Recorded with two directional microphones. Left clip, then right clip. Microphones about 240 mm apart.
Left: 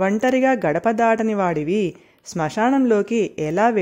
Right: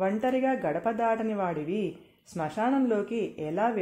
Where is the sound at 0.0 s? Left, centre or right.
Left.